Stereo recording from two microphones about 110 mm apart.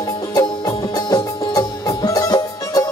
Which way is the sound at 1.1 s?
35° left (ahead or behind).